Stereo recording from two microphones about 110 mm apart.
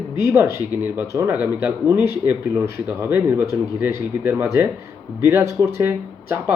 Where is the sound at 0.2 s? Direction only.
25° right (ahead or behind).